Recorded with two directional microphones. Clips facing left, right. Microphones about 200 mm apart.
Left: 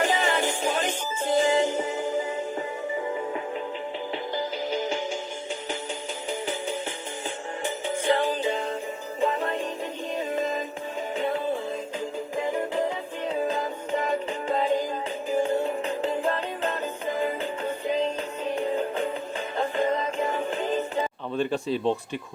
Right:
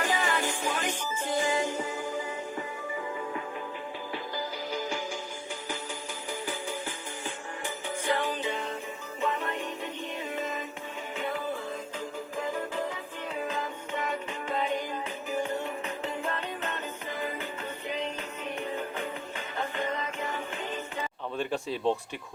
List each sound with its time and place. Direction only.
0.0 s music: 25° left (ahead or behind)
4.1 s music: 25° left (ahead or behind)
6.4 s music: 25° left (ahead or behind)
12.7 s music: 30° left (ahead or behind)
21.3 s speech: 10° right (ahead or behind)